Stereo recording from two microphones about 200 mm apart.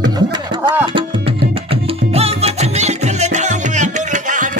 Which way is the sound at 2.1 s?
30° right (ahead or behind).